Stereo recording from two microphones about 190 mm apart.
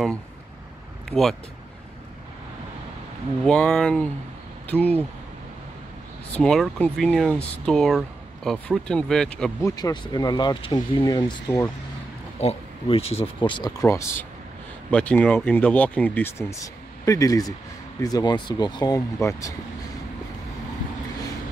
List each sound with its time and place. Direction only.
3.4 s speech: 5° left (ahead or behind)
6.3 s speech: 5° left (ahead or behind)
9.6 s speech: 15° left (ahead or behind)
12.4 s speech: 30° left (ahead or behind)
14.9 s speech: 5° left (ahead or behind)